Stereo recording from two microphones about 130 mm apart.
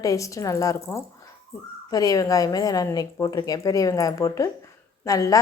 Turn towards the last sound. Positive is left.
turn(degrees=25)  # may be behind; listen again after turning